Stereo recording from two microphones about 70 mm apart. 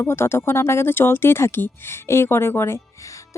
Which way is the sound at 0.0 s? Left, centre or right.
Left.